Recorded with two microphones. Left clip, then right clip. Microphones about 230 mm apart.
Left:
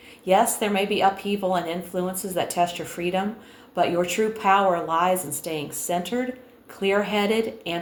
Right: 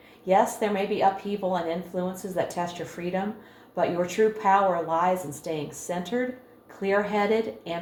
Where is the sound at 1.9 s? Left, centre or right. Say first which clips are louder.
Left 3 dB; left.